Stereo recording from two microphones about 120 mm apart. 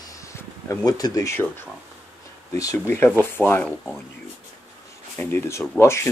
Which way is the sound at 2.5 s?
25° left (ahead or behind).